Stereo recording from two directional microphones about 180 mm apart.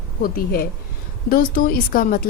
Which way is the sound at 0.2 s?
55° left (ahead or behind).